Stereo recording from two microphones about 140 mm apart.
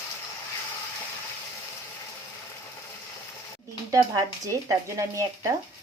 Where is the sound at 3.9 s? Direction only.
20° right (ahead or behind).